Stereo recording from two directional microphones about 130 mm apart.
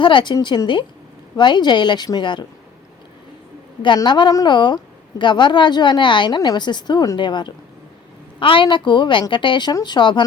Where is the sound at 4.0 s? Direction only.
35° left (ahead or behind).